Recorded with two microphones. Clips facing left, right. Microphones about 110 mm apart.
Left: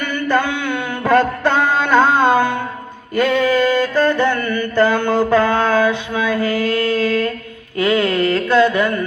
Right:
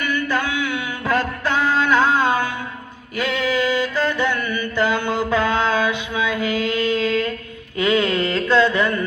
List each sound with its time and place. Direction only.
0.0 s mantra: 55° left (ahead or behind)
1.5 s music: 60° left (ahead or behind)
3.2 s mantra: 55° left (ahead or behind)
5.6 s a sound: 15° right (ahead or behind)